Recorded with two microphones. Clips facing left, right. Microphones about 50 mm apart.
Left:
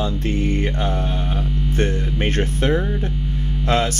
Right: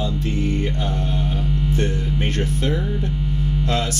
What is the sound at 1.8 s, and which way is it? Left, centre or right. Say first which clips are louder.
Speech: left 1 dB; left.